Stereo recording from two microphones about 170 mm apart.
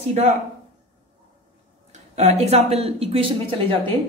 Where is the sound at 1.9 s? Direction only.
40° right (ahead or behind).